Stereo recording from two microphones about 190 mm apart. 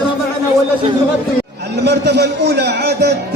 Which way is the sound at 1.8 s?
60° right (ahead or behind).